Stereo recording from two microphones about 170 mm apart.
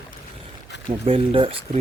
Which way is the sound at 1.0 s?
35° right (ahead or behind).